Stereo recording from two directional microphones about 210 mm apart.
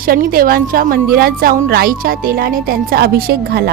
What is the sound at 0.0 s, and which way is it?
A woman's voice, 45° right (ahead or behind).